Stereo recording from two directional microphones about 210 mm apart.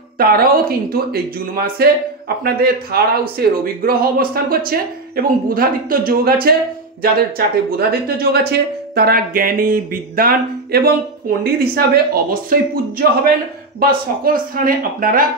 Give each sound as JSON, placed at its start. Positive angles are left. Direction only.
{"t": 0.2, "sound": "speech", "side_deg": -45}
{"t": 13.7, "sound": "speech", "side_deg": -45}